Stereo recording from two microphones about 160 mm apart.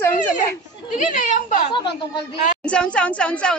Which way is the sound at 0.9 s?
50° left (ahead or behind).